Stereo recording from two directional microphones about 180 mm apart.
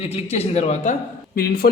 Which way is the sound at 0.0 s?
35° left (ahead or behind).